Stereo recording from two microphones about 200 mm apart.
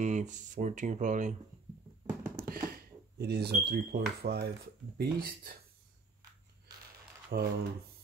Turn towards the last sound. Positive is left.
turn(degrees=-45)  # may be behind; listen again after turning